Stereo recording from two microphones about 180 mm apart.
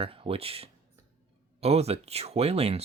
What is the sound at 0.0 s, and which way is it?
Speech, 30° right (ahead or behind).